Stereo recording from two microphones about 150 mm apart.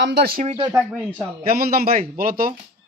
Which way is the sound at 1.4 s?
80° right.